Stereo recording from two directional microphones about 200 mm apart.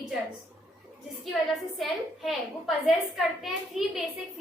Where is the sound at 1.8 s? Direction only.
Centre (ahead or behind).